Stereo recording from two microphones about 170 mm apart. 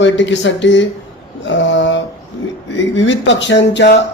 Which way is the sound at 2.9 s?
90° left.